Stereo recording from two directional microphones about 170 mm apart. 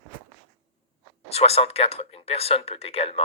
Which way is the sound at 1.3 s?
40° left (ahead or behind).